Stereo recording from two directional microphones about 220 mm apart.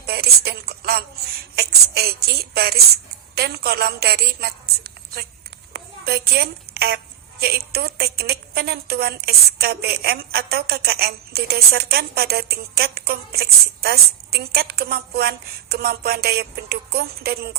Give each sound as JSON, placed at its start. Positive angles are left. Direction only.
{"t": 0.0, "sound": "a woman's voice", "side_deg": -45}